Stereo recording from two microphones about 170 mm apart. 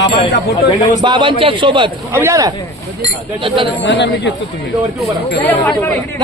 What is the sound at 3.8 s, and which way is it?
Speech, 90° left.